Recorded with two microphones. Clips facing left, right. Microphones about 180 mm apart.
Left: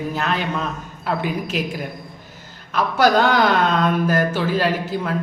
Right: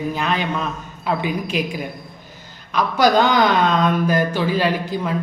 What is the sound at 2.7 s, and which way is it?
A man's voice, 10° left (ahead or behind).